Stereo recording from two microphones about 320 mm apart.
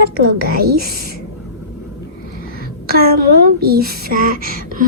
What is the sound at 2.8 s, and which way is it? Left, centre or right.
Speech, right.